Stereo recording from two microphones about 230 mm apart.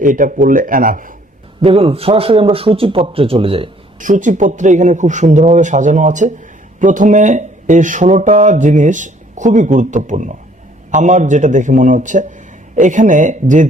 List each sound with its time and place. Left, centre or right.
0.0 s a man's voice: right
1.6 s a man's voice: right